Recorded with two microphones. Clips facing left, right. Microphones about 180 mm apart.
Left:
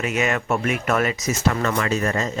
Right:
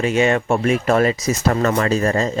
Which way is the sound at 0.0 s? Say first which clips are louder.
Right 6 dB; 30° right (ahead or behind).